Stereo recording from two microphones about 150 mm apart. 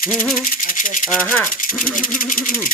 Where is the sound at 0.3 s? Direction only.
65° left (ahead or behind).